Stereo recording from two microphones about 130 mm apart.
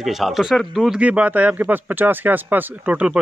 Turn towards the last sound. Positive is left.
turn(degrees=-10)  # may be behind; listen again after turning